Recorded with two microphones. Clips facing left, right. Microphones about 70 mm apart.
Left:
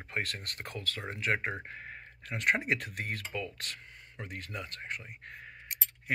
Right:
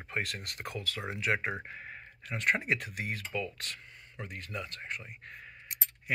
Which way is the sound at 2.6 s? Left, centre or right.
Left.